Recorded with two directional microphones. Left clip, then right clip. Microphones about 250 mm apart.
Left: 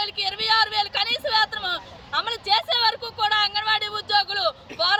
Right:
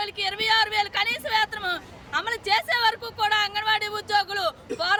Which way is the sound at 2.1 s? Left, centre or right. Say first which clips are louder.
Left 2 dB; right.